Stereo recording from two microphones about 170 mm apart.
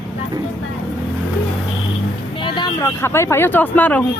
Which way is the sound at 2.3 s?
30° left (ahead or behind).